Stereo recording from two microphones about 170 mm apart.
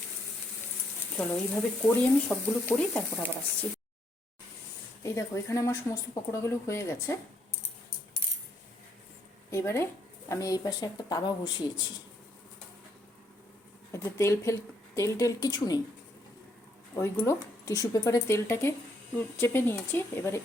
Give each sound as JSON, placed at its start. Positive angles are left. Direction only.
{"t": 1.1, "sound": "a woman's voice", "side_deg": 5}
{"t": 5.0, "sound": "a woman's voice", "side_deg": 15}
{"t": 9.5, "sound": "speech", "side_deg": 15}
{"t": 13.9, "sound": "speech", "side_deg": 15}
{"t": 16.9, "sound": "a woman's voice", "side_deg": 15}